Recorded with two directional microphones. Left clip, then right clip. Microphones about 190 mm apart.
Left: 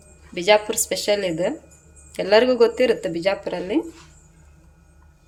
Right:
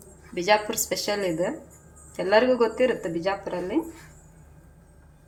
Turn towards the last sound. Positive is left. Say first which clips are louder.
# left 4 dB
turn(degrees=35)  # may be behind; listen again after turning